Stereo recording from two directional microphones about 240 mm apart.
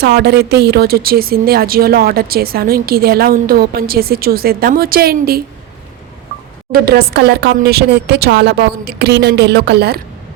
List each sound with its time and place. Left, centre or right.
0.0 s a woman's voice: right
6.7 s speech: right